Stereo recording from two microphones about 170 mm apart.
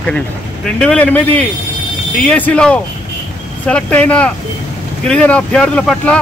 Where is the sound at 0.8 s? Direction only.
5° left (ahead or behind).